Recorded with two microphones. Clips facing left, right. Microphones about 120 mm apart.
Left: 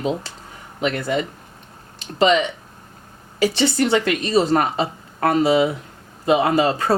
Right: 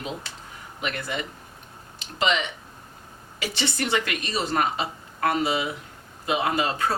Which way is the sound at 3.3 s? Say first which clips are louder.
Left 11 dB; 35° left (ahead or behind).